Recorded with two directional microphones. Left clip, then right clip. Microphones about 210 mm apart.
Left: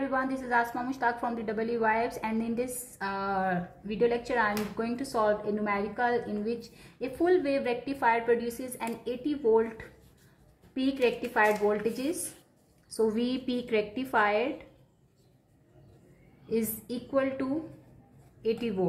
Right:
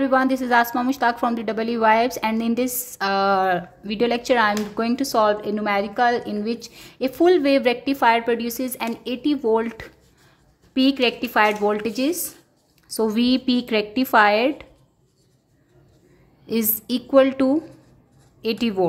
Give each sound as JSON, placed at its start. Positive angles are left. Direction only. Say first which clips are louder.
{"t": 0.0, "sound": "a woman's voice", "louder": "right 11 dB", "side_deg": -40}
{"t": 16.4, "sound": "a woman's voice", "louder": "right 6 dB", "side_deg": -45}